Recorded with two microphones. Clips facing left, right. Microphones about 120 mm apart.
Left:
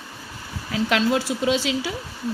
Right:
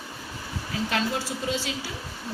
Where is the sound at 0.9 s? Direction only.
90° left.